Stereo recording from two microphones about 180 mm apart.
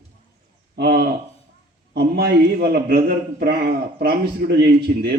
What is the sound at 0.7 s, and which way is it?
A man's voice, 65° right (ahead or behind).